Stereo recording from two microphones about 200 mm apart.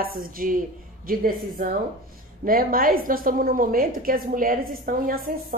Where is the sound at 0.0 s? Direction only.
45° right (ahead or behind).